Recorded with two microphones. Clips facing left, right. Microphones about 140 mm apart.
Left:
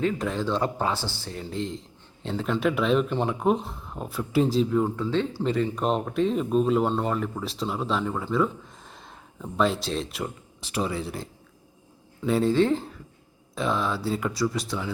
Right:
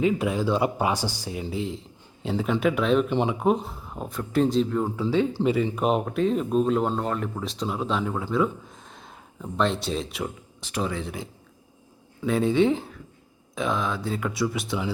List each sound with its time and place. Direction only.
0.0 s speech: 10° right (ahead or behind)
5.1 s speech: 10° right (ahead or behind); by 11.2 s 5° left (ahead or behind)
12.2 s speech: centre (ahead or behind)